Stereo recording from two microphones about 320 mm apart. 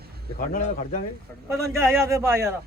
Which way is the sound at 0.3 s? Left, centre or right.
Left.